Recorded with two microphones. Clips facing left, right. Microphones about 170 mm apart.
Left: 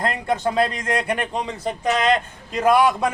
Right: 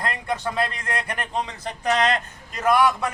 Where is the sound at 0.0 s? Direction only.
25° left (ahead or behind).